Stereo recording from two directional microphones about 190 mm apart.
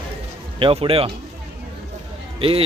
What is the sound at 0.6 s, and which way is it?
Speech, 30° right (ahead or behind).